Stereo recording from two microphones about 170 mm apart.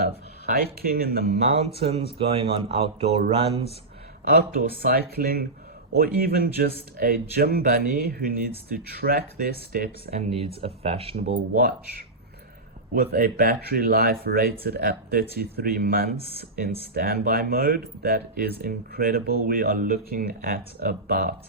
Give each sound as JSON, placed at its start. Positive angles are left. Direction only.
{"t": 0.5, "sound": "speech", "side_deg": -65}
{"t": 1.5, "sound": "speech", "side_deg": -35}
{"t": 4.8, "sound": "speech", "side_deg": -65}
{"t": 10.1, "sound": "speech", "side_deg": -35}
{"t": 11.3, "sound": "speech", "side_deg": -60}
{"t": 12.9, "sound": "speech", "side_deg": -65}
{"t": 16.1, "sound": "speech", "side_deg": 75}
{"t": 16.9, "sound": "speech", "side_deg": -60}